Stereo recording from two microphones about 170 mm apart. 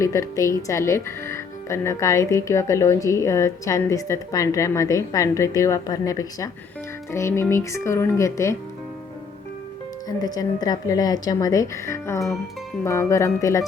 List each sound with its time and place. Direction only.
0.0 s speech: 20° left (ahead or behind)
10.2 s speech: 20° left (ahead or behind)